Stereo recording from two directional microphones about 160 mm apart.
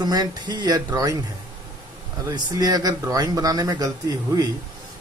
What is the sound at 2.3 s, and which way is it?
Speech, 25° right (ahead or behind).